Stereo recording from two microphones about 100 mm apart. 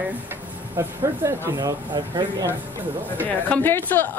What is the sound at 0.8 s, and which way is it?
Speech, 25° right (ahead or behind).